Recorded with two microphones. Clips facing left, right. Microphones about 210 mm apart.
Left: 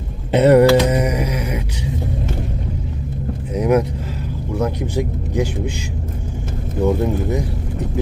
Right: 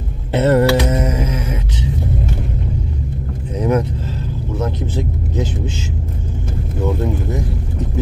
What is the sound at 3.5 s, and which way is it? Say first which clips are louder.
Vehicle: left 1 dB; 10° left (ahead or behind).